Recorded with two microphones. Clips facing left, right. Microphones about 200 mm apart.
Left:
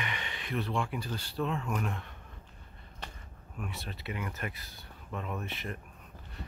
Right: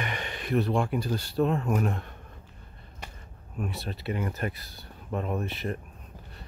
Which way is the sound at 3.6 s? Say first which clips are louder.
Right 7 dB; 35° right (ahead or behind).